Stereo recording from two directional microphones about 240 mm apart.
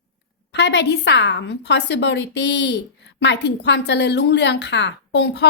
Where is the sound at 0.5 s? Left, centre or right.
Left.